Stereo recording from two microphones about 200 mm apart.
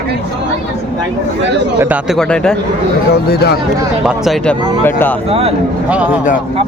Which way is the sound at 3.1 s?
55° left (ahead or behind).